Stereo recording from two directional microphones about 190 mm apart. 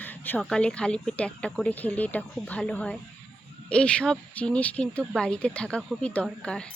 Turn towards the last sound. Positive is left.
turn(degrees=5)  # may be behind; listen again after turning